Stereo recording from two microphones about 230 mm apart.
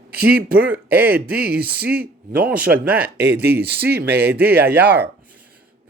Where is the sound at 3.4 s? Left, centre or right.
Right.